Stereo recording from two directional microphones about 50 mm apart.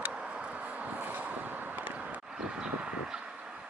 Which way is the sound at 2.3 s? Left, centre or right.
Centre.